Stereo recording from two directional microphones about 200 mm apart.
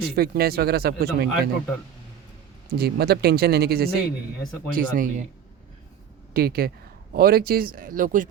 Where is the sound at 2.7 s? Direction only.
55° right (ahead or behind).